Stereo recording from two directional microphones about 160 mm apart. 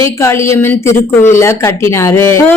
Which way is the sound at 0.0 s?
15° left (ahead or behind).